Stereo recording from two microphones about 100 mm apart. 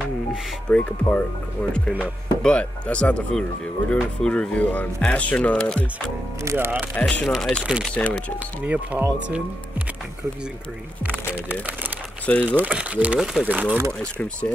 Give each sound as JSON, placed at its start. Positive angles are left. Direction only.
{"t": 0.7, "sound": "speech", "side_deg": 10}
{"t": 6.4, "sound": "speech", "side_deg": -25}
{"t": 7.0, "sound": "speech", "side_deg": 15}
{"t": 7.3, "sound": "speech", "side_deg": 0}
{"t": 7.9, "sound": "speech", "side_deg": 15}
{"t": 8.6, "sound": "speech", "side_deg": -15}
{"t": 12.4, "sound": "speech", "side_deg": -15}
{"t": 13.2, "sound": "speech", "side_deg": 0}
{"t": 13.5, "sound": "speech", "side_deg": -15}
{"t": 13.7, "sound": "speech", "side_deg": -25}